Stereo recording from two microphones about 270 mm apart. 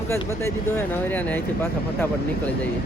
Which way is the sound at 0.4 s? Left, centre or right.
Centre.